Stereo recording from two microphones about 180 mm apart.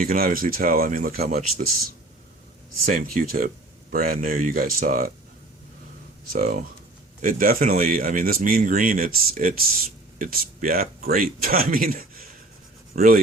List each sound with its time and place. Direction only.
0.0 s speech: 55° right (ahead or behind)
1.2 s speech: 40° right (ahead or behind)
2.8 s speech: 50° right (ahead or behind)
6.3 s speech: 50° right (ahead or behind)